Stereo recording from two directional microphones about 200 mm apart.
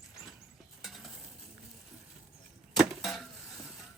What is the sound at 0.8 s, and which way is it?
Stir, centre (ahead or behind).